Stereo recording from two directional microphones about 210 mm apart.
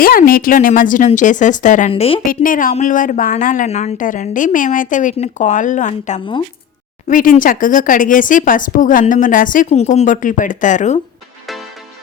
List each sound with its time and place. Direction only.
0.0 s a woman's voice: 45° left (ahead or behind); by 2.2 s 25° left (ahead or behind)
2.2 s a woman's voice: 40° left (ahead or behind); by 6.4 s 25° left (ahead or behind)
7.1 s a woman's voice: 40° left (ahead or behind)